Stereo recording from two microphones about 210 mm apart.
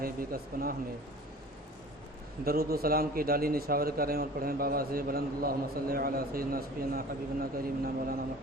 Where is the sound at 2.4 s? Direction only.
45° right (ahead or behind).